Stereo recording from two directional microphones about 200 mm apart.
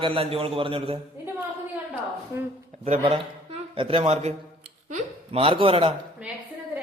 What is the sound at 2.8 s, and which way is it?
A man's voice, 30° right (ahead or behind).